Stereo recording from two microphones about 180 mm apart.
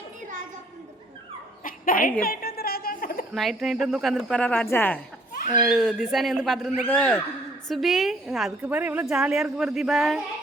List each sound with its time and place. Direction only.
1.6 s a sound: 50° left (ahead or behind)
3.3 s a woman's voice: centre (ahead or behind)
5.6 s a woman's voice: centre (ahead or behind)